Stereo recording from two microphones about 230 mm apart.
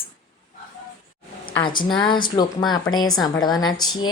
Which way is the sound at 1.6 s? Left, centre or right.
Centre.